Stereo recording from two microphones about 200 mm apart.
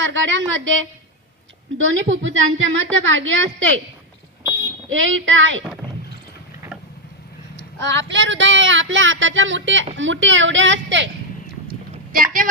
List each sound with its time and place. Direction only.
0.0 s a woman's voice: 65° right (ahead or behind)
4.9 s a woman's voice: 75° right (ahead or behind)
7.5 s vehicle: 65° right (ahead or behind)
8.1 s a woman's voice: 65° right (ahead or behind)
12.1 s speech: 45° right (ahead or behind)